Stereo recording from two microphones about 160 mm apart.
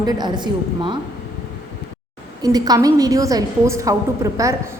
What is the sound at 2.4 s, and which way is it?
A woman's voice, 25° right (ahead or behind).